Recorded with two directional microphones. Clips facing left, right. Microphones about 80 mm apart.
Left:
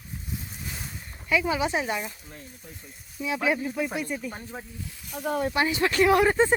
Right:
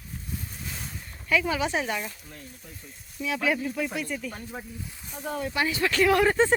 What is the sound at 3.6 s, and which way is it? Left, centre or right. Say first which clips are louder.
Speech: left 1 dB; centre.